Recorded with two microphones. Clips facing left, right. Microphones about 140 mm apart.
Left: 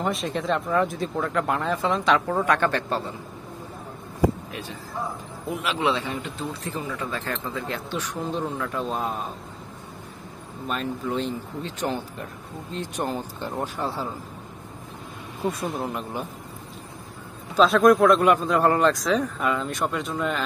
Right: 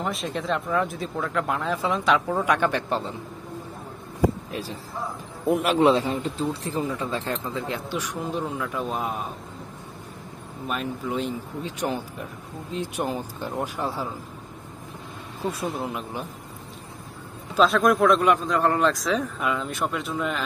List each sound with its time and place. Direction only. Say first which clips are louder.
0.0 s a man's voice: left 2 dB; centre (ahead or behind)
4.5 s speech: right 3 dB; 35° right (ahead or behind)
5.5 s a man's voice: right 6 dB; 50° right (ahead or behind); by 9.3 s 5° right (ahead or behind)
10.7 s speech: left 1 dB; 10° right (ahead or behind)
15.4 s a man's voice: left 1 dB; centre (ahead or behind)
17.6 s a man's voice: left 3 dB; centre (ahead or behind)